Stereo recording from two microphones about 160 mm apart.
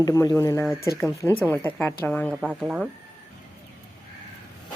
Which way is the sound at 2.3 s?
5° right (ahead or behind).